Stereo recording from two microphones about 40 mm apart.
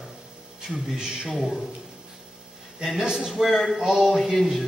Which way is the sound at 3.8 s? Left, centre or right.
Centre.